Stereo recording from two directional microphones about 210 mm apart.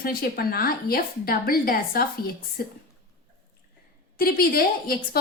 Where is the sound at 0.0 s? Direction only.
45° left (ahead or behind).